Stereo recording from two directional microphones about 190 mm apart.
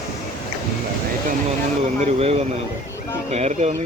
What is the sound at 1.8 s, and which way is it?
Speech, 35° right (ahead or behind).